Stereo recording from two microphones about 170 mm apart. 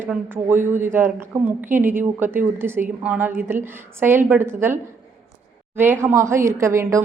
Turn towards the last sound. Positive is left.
turn(degrees=-15)  # may be behind; listen again after turning